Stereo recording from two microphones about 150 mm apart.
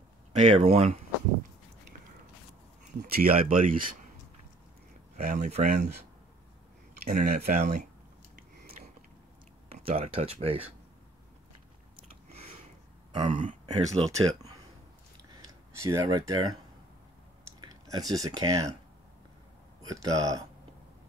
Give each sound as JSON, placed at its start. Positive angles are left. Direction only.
{"t": 0.3, "sound": "speech", "side_deg": -50}
{"t": 3.1, "sound": "speech", "side_deg": -80}
{"t": 5.1, "sound": "speech", "side_deg": -55}
{"t": 7.1, "sound": "speech", "side_deg": -80}
{"t": 8.8, "sound": "biting", "side_deg": -50}
{"t": 9.9, "sound": "speech", "side_deg": -40}
{"t": 12.0, "sound": "chewing", "side_deg": -45}
{"t": 13.3, "sound": "speech", "side_deg": -55}
{"t": 15.4, "sound": "speech", "side_deg": -20}
{"t": 17.6, "sound": "speech", "side_deg": -25}
{"t": 19.8, "sound": "speech", "side_deg": -25}